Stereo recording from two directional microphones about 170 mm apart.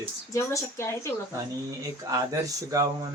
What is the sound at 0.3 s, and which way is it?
Speech, 15° left (ahead or behind).